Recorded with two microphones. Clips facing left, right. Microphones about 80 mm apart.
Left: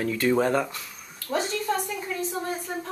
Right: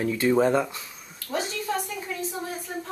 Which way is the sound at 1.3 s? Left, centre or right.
Centre.